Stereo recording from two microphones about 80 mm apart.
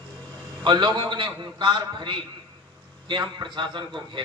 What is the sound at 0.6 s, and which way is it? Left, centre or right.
A man's voice, right.